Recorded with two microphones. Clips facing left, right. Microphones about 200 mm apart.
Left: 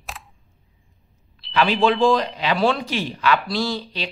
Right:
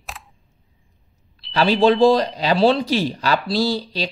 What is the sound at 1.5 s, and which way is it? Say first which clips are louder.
A man's voice: right 3 dB; 35° right (ahead or behind).